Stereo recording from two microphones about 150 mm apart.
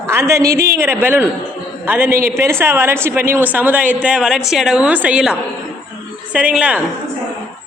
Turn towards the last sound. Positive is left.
turn(degrees=-10)  # may be behind; listen again after turning